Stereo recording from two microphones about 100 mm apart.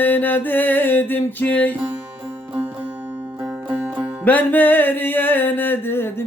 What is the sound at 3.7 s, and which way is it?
Music, 15° right (ahead or behind).